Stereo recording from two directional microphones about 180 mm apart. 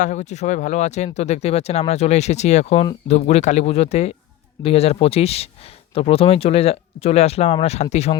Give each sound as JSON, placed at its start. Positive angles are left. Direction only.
{"t": 0.0, "sound": "speech", "side_deg": 40}